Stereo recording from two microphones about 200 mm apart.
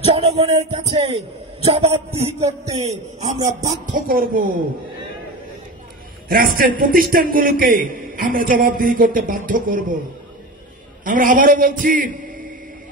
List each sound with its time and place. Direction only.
0.0 s a man's voice: 30° right (ahead or behind); by 4.5 s 45° right (ahead or behind)
6.2 s a man's voice: 45° right (ahead or behind)
11.1 s a man's voice: 40° right (ahead or behind)